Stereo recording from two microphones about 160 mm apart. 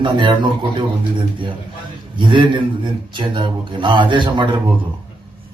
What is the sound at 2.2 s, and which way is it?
Speech, 30° right (ahead or behind).